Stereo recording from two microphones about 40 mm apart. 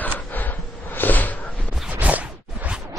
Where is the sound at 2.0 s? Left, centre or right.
Right.